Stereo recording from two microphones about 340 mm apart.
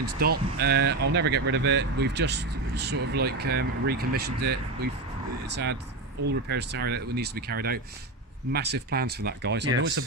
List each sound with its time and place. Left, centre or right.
0.0 s speech: right
6.5 s speech: right